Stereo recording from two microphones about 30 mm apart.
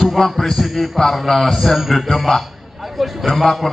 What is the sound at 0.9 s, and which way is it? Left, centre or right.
A man's voice, centre.